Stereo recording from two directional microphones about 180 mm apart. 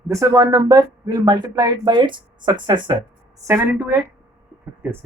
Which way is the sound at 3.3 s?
15° right (ahead or behind).